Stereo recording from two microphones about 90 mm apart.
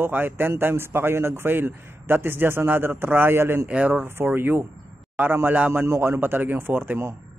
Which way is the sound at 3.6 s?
15° right (ahead or behind).